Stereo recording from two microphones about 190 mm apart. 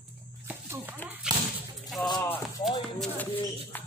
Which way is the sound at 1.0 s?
10° right (ahead or behind).